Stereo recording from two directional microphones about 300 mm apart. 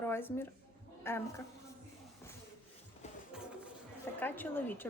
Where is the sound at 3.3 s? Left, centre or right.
Centre.